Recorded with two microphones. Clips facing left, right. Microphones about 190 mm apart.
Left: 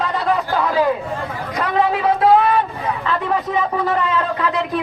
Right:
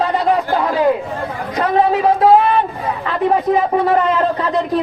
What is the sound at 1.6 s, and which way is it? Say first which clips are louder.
Speech: right 4 dB; 30° right (ahead or behind).